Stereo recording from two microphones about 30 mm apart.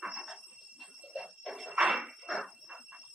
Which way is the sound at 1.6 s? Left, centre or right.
Centre.